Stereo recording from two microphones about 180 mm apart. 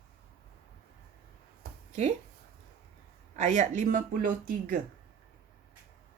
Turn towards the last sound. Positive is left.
turn(degrees=-50)  # may be behind; listen again after turning